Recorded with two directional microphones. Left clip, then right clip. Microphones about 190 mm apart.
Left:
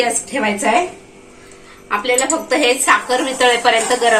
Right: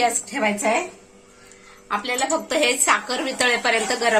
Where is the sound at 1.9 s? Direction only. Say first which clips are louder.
Left 6 dB; 65° right (ahead or behind).